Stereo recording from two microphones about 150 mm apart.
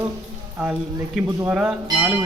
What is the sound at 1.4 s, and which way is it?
Speech, 5° right (ahead or behind).